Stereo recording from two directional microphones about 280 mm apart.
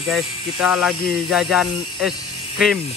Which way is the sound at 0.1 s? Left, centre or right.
Centre.